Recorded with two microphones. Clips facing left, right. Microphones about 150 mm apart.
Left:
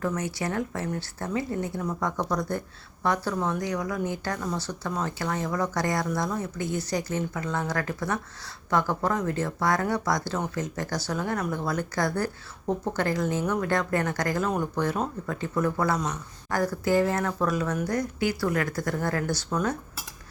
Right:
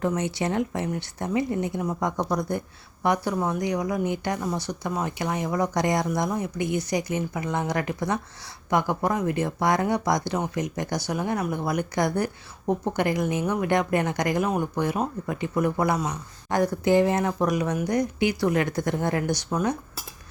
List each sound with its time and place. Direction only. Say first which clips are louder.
0.0 s speech: right 3 dB; 20° right (ahead or behind)